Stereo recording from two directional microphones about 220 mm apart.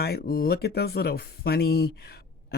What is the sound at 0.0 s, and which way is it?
Speech, 45° left (ahead or behind).